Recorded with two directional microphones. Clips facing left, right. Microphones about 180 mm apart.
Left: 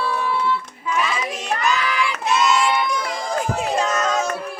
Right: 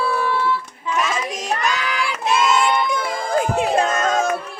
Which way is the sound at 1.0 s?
45° right (ahead or behind).